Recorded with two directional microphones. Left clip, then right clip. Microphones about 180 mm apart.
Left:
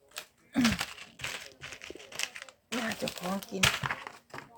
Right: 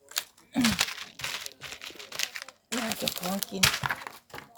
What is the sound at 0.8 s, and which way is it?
Crumpling, 30° right (ahead or behind).